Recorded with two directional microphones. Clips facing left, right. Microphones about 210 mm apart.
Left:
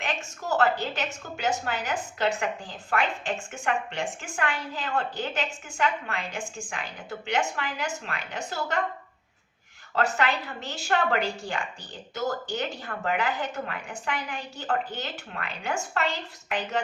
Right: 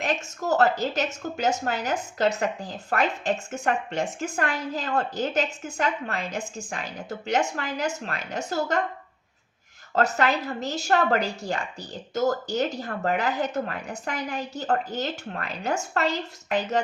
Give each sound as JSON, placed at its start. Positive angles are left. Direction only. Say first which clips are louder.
{"t": 0.0, "sound": "a woman's voice", "louder": "right 5 dB", "side_deg": -40}
{"t": 9.9, "sound": "a woman's voice", "louder": "right 3 dB", "side_deg": -40}